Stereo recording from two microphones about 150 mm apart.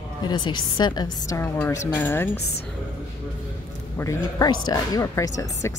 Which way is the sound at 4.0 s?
20° left (ahead or behind).